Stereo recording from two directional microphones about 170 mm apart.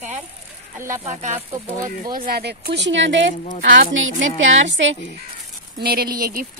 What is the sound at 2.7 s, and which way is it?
A woman's voice, 90° right.